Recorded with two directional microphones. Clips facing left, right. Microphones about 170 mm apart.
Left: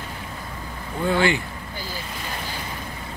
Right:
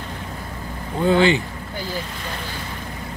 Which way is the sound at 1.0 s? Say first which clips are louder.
Right 5 dB; 20° right (ahead or behind).